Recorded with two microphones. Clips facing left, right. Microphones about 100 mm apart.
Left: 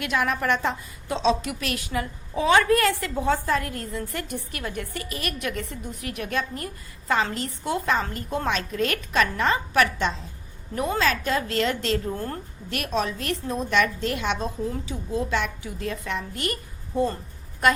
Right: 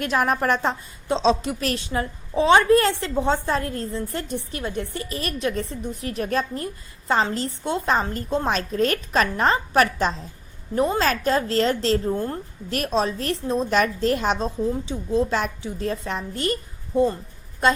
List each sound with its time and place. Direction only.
0.0 s a woman's voice: 40° right (ahead or behind)
12.1 s a woman's voice: 20° right (ahead or behind)
12.7 s a woman's voice: 35° right (ahead or behind)
16.9 s a woman's voice: 15° right (ahead or behind)